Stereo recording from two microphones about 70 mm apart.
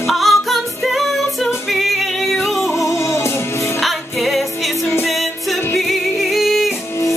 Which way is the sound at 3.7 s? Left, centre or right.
Centre.